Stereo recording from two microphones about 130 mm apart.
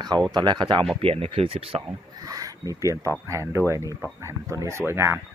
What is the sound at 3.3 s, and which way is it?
Speech, 25° right (ahead or behind).